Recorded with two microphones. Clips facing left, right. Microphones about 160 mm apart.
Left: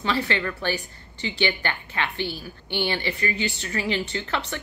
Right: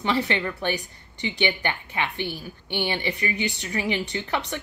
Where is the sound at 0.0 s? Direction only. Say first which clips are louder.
Right 1 dB; 20° right (ahead or behind).